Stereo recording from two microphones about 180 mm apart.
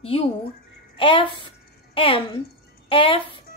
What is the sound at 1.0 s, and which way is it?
A child's voice, 30° left (ahead or behind).